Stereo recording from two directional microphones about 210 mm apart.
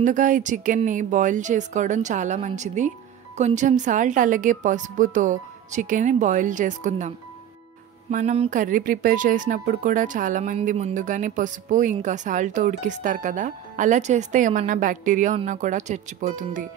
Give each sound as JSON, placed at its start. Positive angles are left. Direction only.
{"t": 0.0, "sound": "speech", "side_deg": -40}